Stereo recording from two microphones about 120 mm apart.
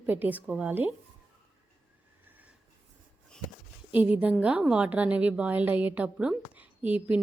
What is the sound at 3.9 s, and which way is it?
A woman's voice, 15° right (ahead or behind).